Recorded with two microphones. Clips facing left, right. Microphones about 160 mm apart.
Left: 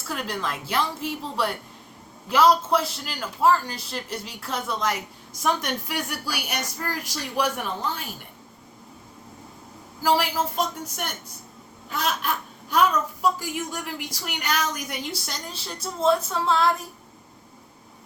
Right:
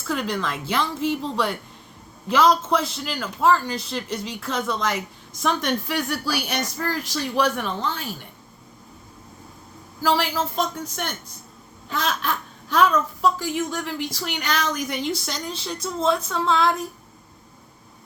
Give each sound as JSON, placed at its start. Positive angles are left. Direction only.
{"t": 0.1, "sound": "a woman's voice", "side_deg": 5}
{"t": 10.0, "sound": "a woman's voice", "side_deg": 10}
{"t": 11.9, "sound": "a woman's voice", "side_deg": 10}